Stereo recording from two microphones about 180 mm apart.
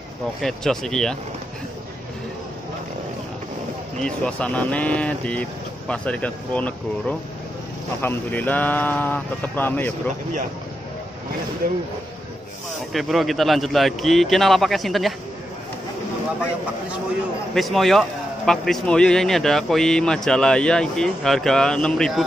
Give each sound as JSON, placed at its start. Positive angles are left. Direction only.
{"t": 0.4, "sound": "a man's voice", "side_deg": 5}
{"t": 4.0, "sound": "speech", "side_deg": 5}
{"t": 11.6, "sound": "speech", "side_deg": -55}
{"t": 12.9, "sound": "a man's voice", "side_deg": 0}
{"t": 17.6, "sound": "a man's voice", "side_deg": 0}